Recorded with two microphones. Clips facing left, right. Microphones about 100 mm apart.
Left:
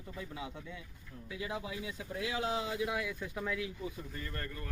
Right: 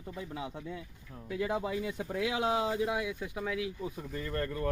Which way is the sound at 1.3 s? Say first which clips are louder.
Right 7 dB; 55° right (ahead or behind).